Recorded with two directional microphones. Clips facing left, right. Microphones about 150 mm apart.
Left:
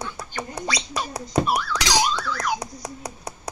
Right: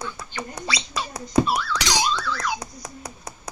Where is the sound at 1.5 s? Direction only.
15° left (ahead or behind).